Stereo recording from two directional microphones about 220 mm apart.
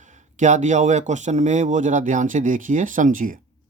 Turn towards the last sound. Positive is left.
turn(degrees=-35)  # may be behind; listen again after turning